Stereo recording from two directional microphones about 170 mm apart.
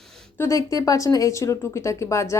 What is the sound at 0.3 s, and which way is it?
A woman's voice, 20° left (ahead or behind).